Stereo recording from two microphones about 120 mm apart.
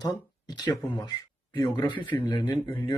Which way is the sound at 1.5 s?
20° left (ahead or behind).